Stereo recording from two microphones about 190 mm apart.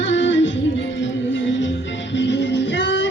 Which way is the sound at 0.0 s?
75° left (ahead or behind).